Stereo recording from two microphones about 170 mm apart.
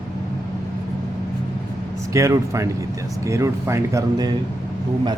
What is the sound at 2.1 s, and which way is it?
Speech, 20° right (ahead or behind).